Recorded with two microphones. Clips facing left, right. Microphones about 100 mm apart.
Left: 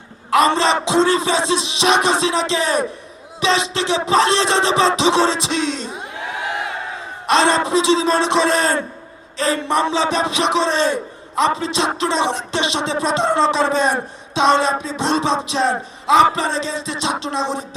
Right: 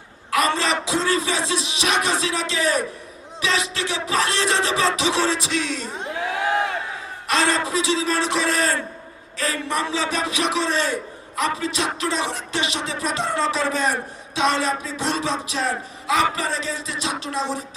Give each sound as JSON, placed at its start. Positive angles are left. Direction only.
{"t": 0.3, "sound": "speech", "side_deg": 25}
{"t": 7.3, "sound": "speech", "side_deg": 25}